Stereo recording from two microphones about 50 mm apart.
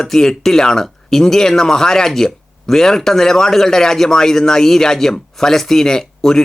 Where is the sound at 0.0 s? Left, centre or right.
Centre.